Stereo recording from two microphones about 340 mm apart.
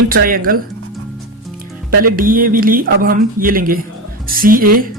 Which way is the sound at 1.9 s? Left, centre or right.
Right.